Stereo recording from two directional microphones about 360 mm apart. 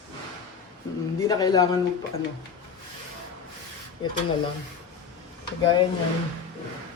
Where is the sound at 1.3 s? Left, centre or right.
Centre.